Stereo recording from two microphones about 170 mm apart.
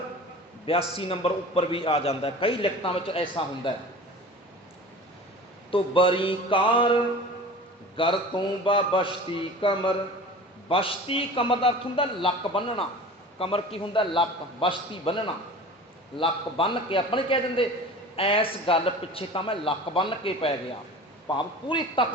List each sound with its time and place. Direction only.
0.6 s a man's voice: 35° left (ahead or behind)
5.7 s a man's voice: 30° left (ahead or behind)
7.9 s a man's voice: 30° left (ahead or behind)